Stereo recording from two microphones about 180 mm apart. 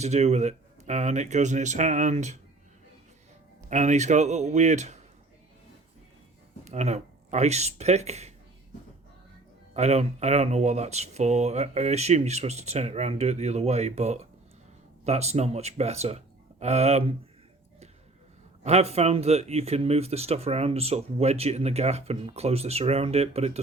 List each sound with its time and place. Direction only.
0.0 s speech: 35° right (ahead or behind)
3.7 s speech: 40° right (ahead or behind)
6.7 s speech: 40° right (ahead or behind)
9.7 s speech: 35° right (ahead or behind)
18.6 s speech: 35° right (ahead or behind)